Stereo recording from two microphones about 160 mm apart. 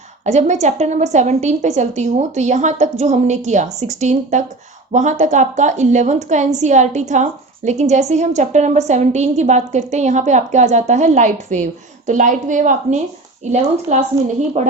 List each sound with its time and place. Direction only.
0.3 s a woman's voice: 45° right (ahead or behind)